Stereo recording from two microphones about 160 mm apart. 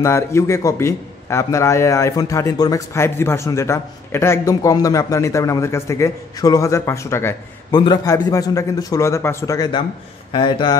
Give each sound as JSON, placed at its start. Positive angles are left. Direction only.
{"t": 0.0, "sound": "a man's voice", "side_deg": 15}